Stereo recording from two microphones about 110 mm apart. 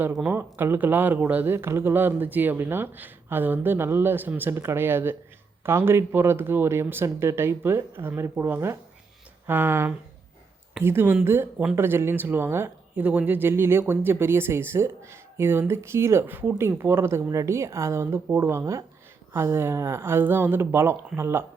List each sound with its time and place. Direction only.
0.0 s speech: 10° right (ahead or behind)